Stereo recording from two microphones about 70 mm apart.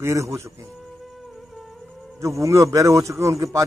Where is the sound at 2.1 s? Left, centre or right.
Right.